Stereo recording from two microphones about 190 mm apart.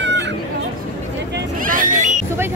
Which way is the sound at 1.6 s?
45° right (ahead or behind).